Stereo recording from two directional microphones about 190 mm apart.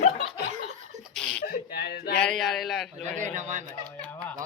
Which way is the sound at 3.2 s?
40° right (ahead or behind).